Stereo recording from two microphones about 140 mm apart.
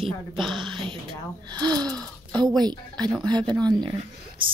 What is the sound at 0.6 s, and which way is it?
Speech, 35° right (ahead or behind).